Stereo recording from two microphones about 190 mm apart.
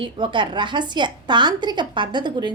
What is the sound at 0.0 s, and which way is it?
A woman's voice, 25° right (ahead or behind).